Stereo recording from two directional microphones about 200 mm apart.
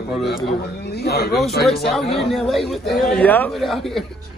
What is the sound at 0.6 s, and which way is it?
Speech, 55° left (ahead or behind).